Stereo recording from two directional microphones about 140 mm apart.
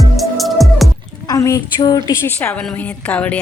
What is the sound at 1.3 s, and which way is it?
Speech, 25° left (ahead or behind).